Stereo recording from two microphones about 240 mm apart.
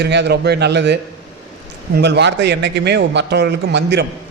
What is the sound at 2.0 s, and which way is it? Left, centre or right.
A man's voice, right.